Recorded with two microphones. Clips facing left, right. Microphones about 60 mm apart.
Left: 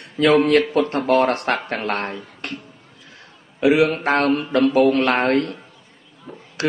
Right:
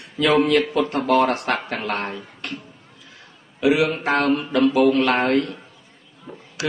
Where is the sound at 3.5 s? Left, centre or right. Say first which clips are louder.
Left 2 dB; left.